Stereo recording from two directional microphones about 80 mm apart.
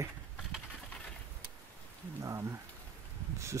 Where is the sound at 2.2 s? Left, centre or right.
Right.